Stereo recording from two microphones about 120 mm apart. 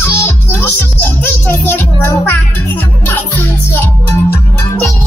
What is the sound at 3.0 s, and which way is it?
Music, 20° left (ahead or behind).